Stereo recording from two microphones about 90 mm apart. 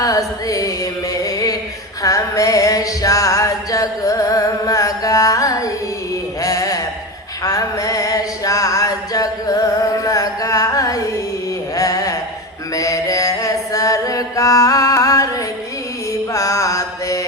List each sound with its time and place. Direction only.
0.0 s music: 40° left (ahead or behind)
1.1 s a sound: 40° left (ahead or behind)
2.0 s music: 40° left (ahead or behind)
11.8 s a sound: 40° left (ahead or behind)
12.7 s chant: 40° left (ahead or behind)
16.3 s mantra: 35° left (ahead or behind)